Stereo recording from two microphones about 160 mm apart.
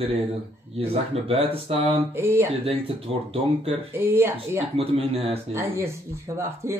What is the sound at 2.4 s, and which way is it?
Speech, 40° right (ahead or behind).